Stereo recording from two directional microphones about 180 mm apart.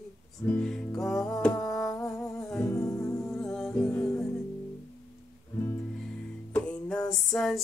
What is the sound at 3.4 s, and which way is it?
Music, centre (ahead or behind).